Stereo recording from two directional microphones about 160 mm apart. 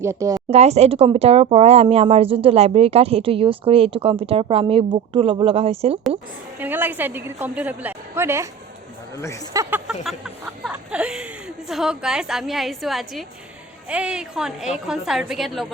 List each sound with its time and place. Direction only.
0.0 s speech: 20° right (ahead or behind)
0.5 s speech: 40° right (ahead or behind)
6.6 s a woman's voice: 10° right (ahead or behind)
9.1 s speech: 20° left (ahead or behind)
9.5 s a woman's voice: 15° right (ahead or behind)